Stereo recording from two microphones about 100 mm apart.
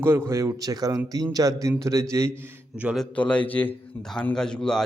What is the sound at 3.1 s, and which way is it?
Speech, 10° left (ahead or behind).